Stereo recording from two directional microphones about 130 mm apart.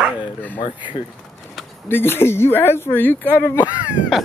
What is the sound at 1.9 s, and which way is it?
Speech, 15° left (ahead or behind).